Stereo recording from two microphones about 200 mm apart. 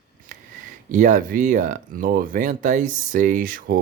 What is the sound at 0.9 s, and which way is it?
Speech, 40° right (ahead or behind).